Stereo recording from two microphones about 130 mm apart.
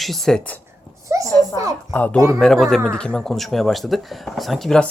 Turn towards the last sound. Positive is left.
turn(degrees=5)  # may be behind; listen again after turning